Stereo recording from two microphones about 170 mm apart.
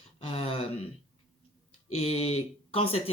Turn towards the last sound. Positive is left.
turn(degrees=35)  # may be behind; listen again after turning